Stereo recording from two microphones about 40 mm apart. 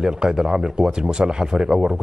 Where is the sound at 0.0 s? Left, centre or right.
Centre.